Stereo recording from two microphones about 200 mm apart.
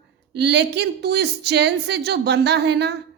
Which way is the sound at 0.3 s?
60° right (ahead or behind).